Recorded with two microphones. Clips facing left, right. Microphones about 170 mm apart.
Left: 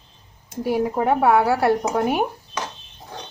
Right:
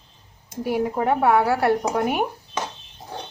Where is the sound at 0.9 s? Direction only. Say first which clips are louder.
Left 1 dB; 25° left (ahead or behind).